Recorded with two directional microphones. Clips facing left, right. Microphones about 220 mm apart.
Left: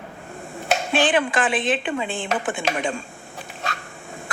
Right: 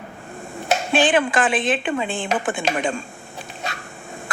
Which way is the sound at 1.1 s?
50° right (ahead or behind).